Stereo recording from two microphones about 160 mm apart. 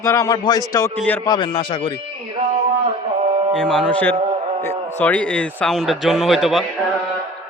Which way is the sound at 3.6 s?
5° left (ahead or behind).